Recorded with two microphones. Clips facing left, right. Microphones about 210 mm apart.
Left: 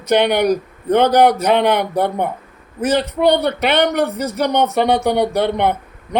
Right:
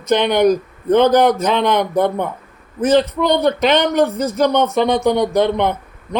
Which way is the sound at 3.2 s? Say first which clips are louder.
Even; 60° left (ahead or behind).